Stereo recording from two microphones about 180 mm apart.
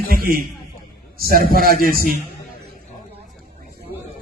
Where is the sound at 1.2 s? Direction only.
55° right (ahead or behind).